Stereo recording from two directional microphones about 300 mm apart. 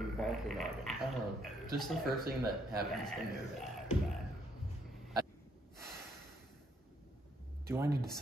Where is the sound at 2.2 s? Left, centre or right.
Right.